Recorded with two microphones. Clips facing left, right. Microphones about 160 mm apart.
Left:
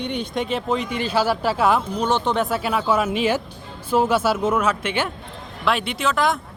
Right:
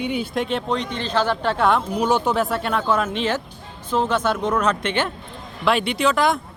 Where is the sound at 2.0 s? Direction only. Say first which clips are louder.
Right 1 dB; 10° right (ahead or behind).